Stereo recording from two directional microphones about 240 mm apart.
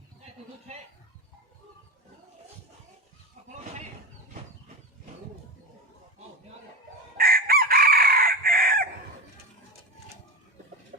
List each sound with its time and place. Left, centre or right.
7.2 s chicken: right